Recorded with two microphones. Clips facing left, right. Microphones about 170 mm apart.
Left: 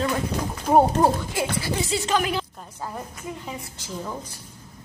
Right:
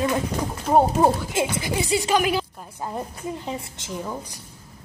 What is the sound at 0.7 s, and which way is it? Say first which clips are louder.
Speech: left 1 dB; centre (ahead or behind).